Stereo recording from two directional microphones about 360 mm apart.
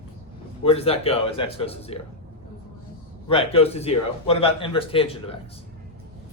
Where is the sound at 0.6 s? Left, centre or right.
Centre.